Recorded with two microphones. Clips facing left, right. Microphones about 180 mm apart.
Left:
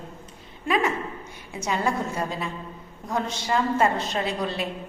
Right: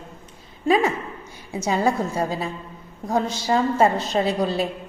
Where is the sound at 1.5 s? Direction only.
35° right (ahead or behind).